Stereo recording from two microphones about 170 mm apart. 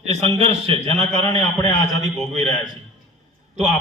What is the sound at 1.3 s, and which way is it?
Speech, 25° left (ahead or behind).